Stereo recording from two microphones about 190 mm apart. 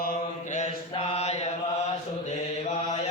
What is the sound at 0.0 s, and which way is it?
Mantra, 45° left (ahead or behind).